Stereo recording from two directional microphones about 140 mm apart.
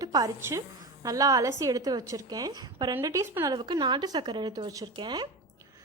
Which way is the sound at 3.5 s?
30° right (ahead or behind).